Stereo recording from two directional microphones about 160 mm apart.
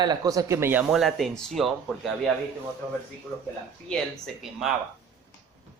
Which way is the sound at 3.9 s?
Centre (ahead or behind).